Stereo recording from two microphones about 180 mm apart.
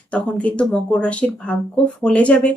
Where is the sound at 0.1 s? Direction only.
5° left (ahead or behind).